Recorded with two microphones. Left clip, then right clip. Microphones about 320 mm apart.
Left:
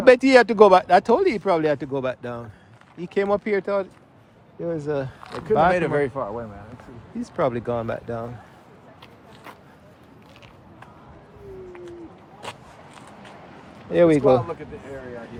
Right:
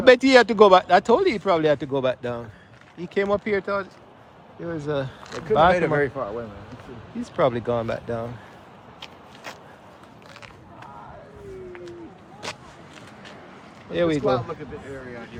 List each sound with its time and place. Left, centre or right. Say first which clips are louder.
0.0 s speech: left 1 dB; centre
5.7 s speech: even; left
7.2 s speech: right 2 dB; centre
9.0 s a sound: right 4 dB; right
13.9 s speech: left 6 dB; centre